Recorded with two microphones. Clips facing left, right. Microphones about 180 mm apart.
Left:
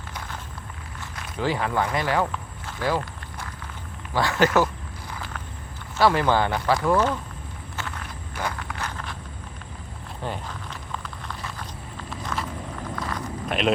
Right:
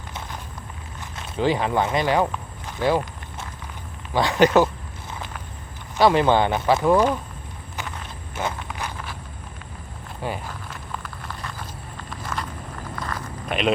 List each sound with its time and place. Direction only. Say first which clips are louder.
0.1 s a sound: right 2 dB; 20° right (ahead or behind)
4.1 s speech: right 4 dB; 20° right (ahead or behind)
5.1 s walk: right 1 dB; 20° right (ahead or behind)
6.0 s speech: right 3 dB; 20° right (ahead or behind)
7.8 s walk: right 1 dB; 20° right (ahead or behind)
10.2 s a sound: right 2 dB; 10° right (ahead or behind)
11.9 s walk: even; centre (ahead or behind)
13.0 s a sound: even; centre (ahead or behind)
13.5 s speech: right 1 dB; centre (ahead or behind)